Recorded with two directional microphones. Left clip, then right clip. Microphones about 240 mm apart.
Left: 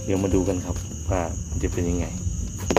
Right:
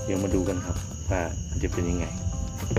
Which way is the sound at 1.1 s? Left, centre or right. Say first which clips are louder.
Left 3 dB; centre.